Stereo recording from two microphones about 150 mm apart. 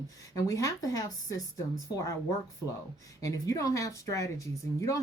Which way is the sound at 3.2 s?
20° left (ahead or behind).